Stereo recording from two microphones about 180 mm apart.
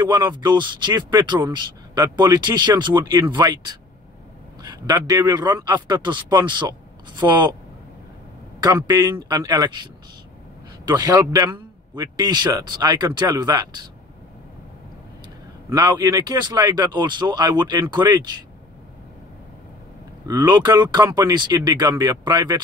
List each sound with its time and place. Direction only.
0.3 s speech: 25° right (ahead or behind)
8.6 s speech: 20° right (ahead or behind)
10.9 s speech: 20° right (ahead or behind)
15.7 s speech: 20° right (ahead or behind)
20.2 s speech: 25° right (ahead or behind)